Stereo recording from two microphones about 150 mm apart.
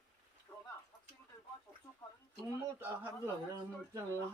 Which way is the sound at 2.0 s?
25° left (ahead or behind).